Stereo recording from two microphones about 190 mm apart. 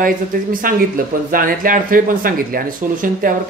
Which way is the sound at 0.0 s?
45° right (ahead or behind).